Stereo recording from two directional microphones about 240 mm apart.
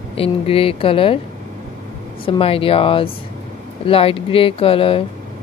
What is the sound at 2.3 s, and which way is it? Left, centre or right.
Speech, left.